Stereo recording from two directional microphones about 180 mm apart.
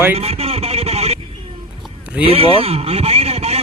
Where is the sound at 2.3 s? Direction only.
30° right (ahead or behind).